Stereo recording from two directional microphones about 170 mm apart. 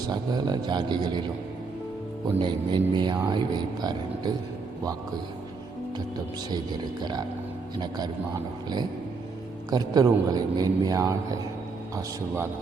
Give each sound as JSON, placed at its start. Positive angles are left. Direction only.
{"t": 0.1, "sound": "a man's voice", "side_deg": -25}
{"t": 2.4, "sound": "a man's voice", "side_deg": -25}
{"t": 6.5, "sound": "a man's voice", "side_deg": -25}
{"t": 9.6, "sound": "a man's voice", "side_deg": -25}